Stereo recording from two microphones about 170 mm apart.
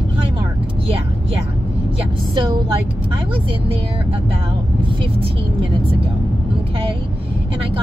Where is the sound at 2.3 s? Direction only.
30° right (ahead or behind).